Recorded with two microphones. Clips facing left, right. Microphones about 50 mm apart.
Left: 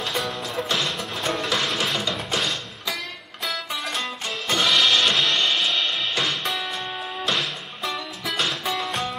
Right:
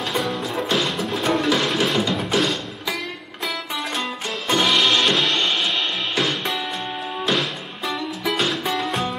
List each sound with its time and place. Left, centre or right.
0.1 s music: centre
4.5 s music: centre
5.0 s music: centre